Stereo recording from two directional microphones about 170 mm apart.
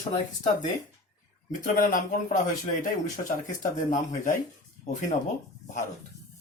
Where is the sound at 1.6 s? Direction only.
50° left (ahead or behind).